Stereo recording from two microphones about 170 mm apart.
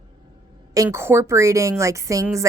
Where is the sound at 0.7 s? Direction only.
20° right (ahead or behind).